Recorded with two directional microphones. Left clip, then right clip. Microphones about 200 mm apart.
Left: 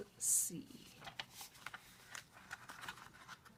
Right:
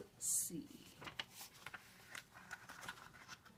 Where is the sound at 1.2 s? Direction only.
5° left (ahead or behind).